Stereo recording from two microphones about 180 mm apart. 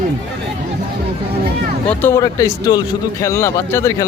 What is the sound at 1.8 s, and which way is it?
Speech, 10° left (ahead or behind).